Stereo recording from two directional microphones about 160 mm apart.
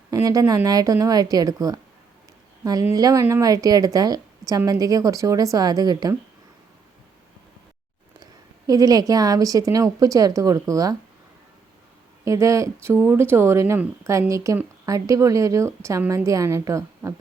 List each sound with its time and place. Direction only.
0.1 s speech: 20° right (ahead or behind)
2.8 s speech: 20° right (ahead or behind)
8.2 s speech: 25° right (ahead or behind)
12.2 s speech: 20° right (ahead or behind)